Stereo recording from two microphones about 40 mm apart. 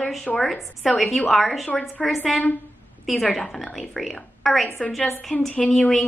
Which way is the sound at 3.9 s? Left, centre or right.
Centre.